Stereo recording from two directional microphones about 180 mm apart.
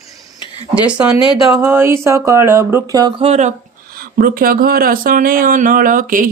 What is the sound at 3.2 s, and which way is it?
Speech, 40° right (ahead or behind).